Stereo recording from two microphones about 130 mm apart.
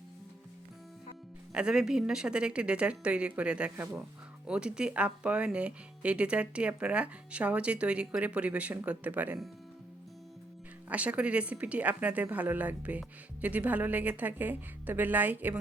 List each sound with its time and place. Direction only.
1.5 s speech: 5° right (ahead or behind)
10.8 s speech: 10° right (ahead or behind)